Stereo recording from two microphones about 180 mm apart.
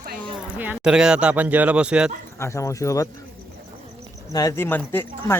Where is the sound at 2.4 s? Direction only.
15° left (ahead or behind).